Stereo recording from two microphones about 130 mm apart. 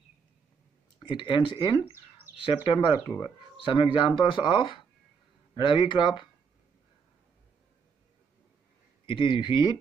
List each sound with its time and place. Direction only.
1.0 s speech: 40° left (ahead or behind)
9.0 s speech: 40° left (ahead or behind)